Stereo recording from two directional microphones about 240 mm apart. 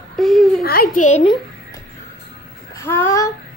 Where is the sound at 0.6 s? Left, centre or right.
Left.